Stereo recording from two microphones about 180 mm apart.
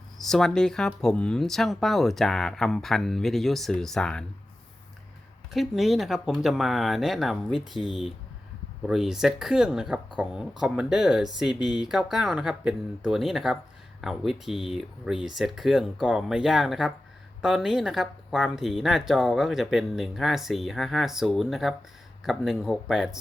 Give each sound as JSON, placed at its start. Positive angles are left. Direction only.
{"t": 0.2, "sound": "speech", "side_deg": 0}
{"t": 5.5, "sound": "speech", "side_deg": 0}